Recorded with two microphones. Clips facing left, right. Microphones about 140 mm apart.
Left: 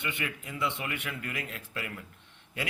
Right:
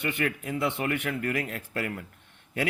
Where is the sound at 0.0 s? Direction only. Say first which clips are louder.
Right 7 dB; 50° right (ahead or behind).